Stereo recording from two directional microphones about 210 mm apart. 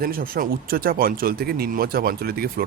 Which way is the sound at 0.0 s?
45° right (ahead or behind).